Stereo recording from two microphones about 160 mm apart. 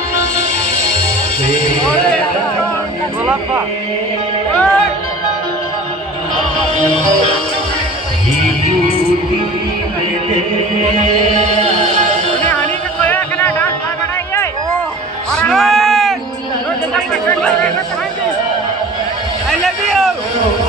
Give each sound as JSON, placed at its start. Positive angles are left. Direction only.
{"t": 1.9, "sound": "music", "side_deg": 5}
{"t": 4.6, "sound": "music", "side_deg": 5}
{"t": 11.6, "sound": "music", "side_deg": -45}
{"t": 12.4, "sound": "music", "side_deg": 10}
{"t": 15.3, "sound": "a sound", "side_deg": 5}
{"t": 16.9, "sound": "speech", "side_deg": 5}
{"t": 19.5, "sound": "a sound", "side_deg": 0}